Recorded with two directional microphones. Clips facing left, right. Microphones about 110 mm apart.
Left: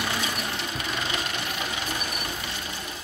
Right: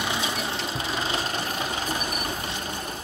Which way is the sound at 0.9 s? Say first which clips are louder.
Right 3 dB; 30° right (ahead or behind).